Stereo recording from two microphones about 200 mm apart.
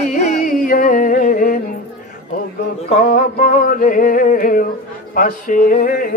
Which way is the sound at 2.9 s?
40° left (ahead or behind).